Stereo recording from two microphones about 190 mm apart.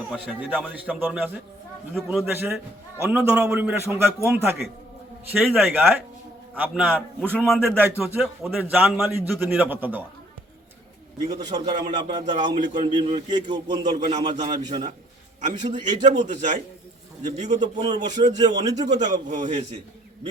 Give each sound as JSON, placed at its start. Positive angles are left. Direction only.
{"t": 0.1, "sound": "a man's voice", "side_deg": 5}
{"t": 0.7, "sound": "a man's voice", "side_deg": -10}
{"t": 7.3, "sound": "a man's voice", "side_deg": 5}
{"t": 11.3, "sound": "a man's voice", "side_deg": -20}
{"t": 15.4, "sound": "speech", "side_deg": -40}
{"t": 17.6, "sound": "speech", "side_deg": -30}
{"t": 18.6, "sound": "a man's voice", "side_deg": -20}
{"t": 18.9, "sound": "speech", "side_deg": -40}